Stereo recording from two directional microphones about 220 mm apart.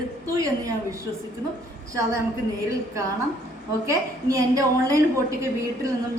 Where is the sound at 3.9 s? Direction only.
15° right (ahead or behind).